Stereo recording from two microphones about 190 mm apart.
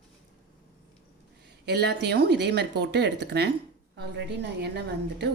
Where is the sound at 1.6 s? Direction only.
60° right (ahead or behind).